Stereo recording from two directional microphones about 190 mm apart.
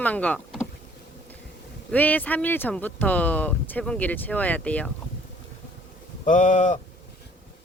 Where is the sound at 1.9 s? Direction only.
10° left (ahead or behind).